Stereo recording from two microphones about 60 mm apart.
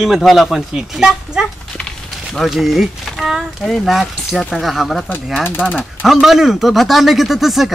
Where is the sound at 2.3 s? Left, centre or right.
Centre.